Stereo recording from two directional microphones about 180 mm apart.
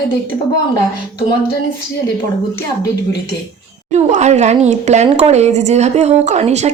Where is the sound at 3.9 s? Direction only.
40° right (ahead or behind).